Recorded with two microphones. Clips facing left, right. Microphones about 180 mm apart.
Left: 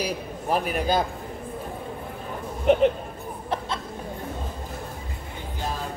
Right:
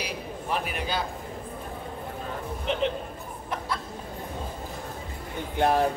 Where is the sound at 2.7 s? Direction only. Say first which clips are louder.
Left 11 dB; 50° left (ahead or behind).